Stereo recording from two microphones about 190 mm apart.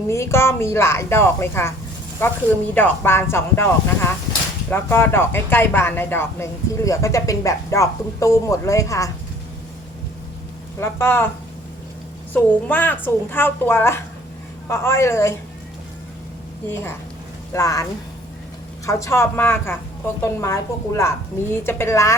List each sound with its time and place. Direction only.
0.1 s speech: 15° left (ahead or behind)
10.8 s speech: 15° left (ahead or behind)
12.3 s speech: 10° left (ahead or behind)
17.5 s speech: 15° left (ahead or behind)
18.9 s speech: 15° left (ahead or behind)